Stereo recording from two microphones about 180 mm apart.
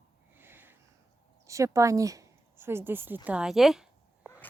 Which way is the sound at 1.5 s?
15° right (ahead or behind).